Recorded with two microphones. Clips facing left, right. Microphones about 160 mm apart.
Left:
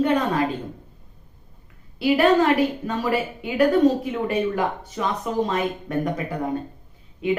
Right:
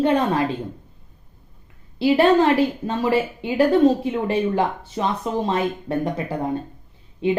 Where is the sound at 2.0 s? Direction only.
30° right (ahead or behind).